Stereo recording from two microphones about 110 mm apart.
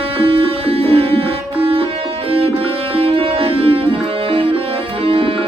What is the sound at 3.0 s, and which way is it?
Music, 60° right (ahead or behind).